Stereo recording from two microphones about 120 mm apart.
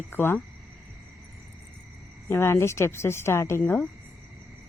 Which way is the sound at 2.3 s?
20° left (ahead or behind).